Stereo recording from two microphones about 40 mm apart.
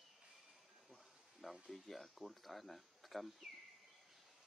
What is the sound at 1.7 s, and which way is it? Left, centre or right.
Speech, centre.